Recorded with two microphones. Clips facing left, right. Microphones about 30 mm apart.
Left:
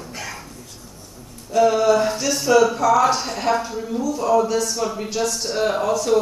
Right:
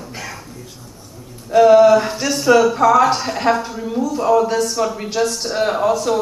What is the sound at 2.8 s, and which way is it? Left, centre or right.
A man's voice, right.